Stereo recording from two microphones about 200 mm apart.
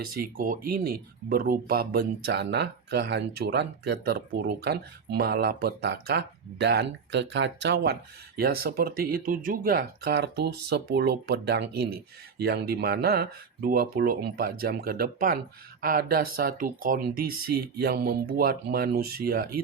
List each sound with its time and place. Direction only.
0.1 s speech: 45° right (ahead or behind); by 7.9 s 60° right (ahead or behind)
8.4 s speech: 50° right (ahead or behind)